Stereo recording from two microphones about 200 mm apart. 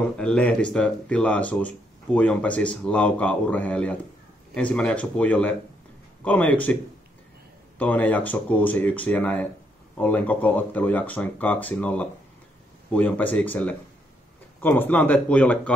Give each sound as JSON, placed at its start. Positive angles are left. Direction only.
{"t": 0.2, "sound": "speech", "side_deg": 5}
{"t": 7.8, "sound": "speech", "side_deg": 10}